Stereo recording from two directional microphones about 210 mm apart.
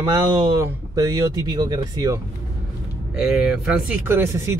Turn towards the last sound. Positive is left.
turn(degrees=-10)  # may be behind; listen again after turning